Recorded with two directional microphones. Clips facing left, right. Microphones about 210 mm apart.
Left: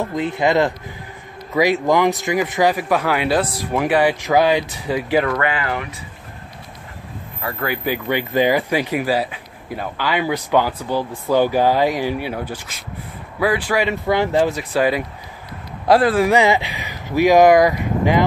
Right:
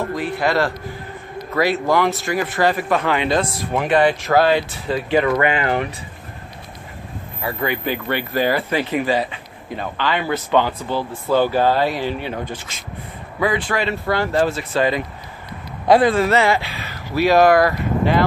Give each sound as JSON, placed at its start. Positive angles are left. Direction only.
{"t": 0.0, "sound": "speech", "side_deg": 20}
{"t": 5.3, "sound": "speech", "side_deg": -20}
{"t": 7.4, "sound": "speech", "side_deg": 5}